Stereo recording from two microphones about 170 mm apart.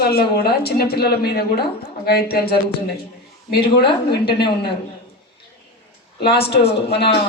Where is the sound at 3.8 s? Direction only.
30° left (ahead or behind).